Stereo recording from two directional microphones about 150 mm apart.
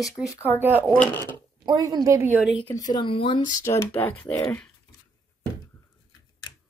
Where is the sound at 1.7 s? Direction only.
25° right (ahead or behind).